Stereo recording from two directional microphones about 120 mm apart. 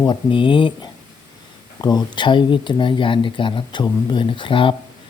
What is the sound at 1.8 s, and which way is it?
Speech, 35° left (ahead or behind).